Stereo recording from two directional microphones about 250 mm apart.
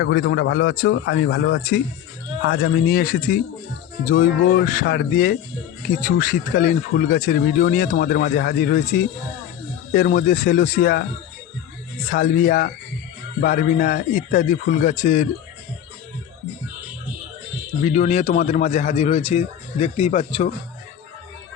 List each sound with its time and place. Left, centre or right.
0.0 s a man's voice: left
2.5 s speech: left
12.0 s speech: left
17.8 s a man's voice: left